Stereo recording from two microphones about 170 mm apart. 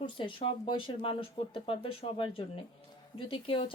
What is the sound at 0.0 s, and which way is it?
Speech, 30° left (ahead or behind).